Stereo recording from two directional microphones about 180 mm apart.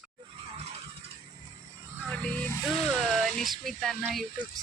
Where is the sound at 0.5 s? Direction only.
35° right (ahead or behind).